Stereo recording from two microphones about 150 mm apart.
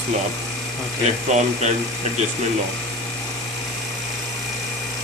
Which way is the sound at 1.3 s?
50° right (ahead or behind).